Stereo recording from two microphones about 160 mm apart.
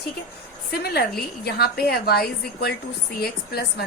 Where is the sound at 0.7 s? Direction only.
80° left.